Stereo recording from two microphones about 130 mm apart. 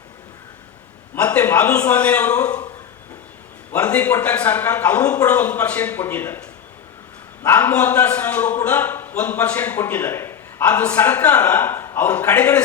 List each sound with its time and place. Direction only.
1.1 s a man's voice: 10° left (ahead or behind)
3.7 s a man's voice: 10° left (ahead or behind)
7.4 s a man's voice: 15° left (ahead or behind)